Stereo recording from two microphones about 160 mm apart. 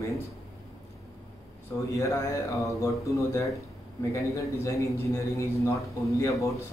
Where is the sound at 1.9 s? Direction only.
20° left (ahead or behind).